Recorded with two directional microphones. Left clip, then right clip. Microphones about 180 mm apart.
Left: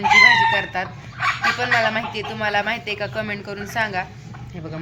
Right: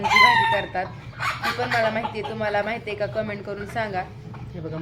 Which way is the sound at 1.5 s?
Centre (ahead or behind).